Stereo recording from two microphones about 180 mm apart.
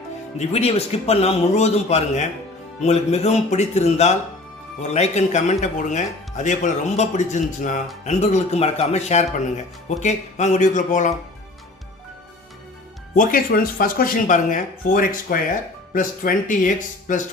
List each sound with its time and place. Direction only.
0.3 s speech: 35° left (ahead or behind)
13.1 s speech: 50° left (ahead or behind)